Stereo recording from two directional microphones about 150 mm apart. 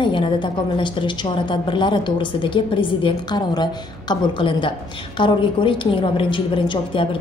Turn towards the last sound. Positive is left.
turn(degrees=35)  # may be behind; listen again after turning